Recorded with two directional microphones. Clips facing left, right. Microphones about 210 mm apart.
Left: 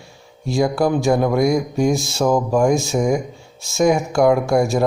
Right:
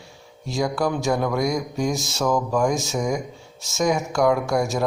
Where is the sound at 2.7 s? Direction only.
10° left (ahead or behind).